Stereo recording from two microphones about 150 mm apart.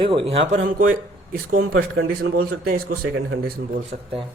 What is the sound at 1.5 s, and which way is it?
Speech, 70° right (ahead or behind).